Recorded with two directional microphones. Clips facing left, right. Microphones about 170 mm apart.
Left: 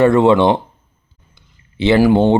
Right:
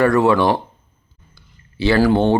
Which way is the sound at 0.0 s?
25° left (ahead or behind).